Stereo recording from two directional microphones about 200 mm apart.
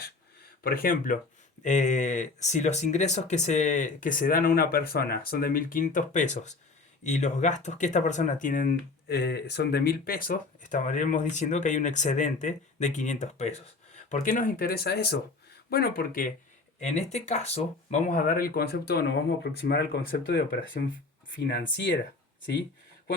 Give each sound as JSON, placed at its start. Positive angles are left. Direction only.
{"t": 0.6, "sound": "speech", "side_deg": 45}
{"t": 16.8, "sound": "speech", "side_deg": 35}